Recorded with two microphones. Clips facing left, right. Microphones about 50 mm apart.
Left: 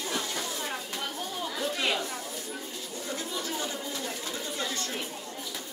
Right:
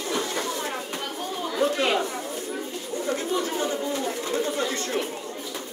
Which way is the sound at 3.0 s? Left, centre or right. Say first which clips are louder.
Right 8 dB; right.